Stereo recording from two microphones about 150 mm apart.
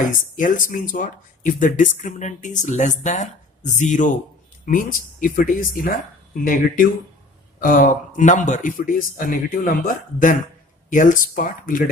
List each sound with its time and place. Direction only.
0.0 s speech: 60° left (ahead or behind)